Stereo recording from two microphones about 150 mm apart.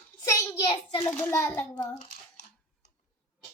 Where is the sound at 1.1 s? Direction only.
15° left (ahead or behind).